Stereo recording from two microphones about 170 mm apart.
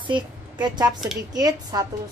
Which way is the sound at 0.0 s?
25° right (ahead or behind).